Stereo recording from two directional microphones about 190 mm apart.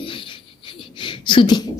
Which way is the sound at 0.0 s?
25° left (ahead or behind).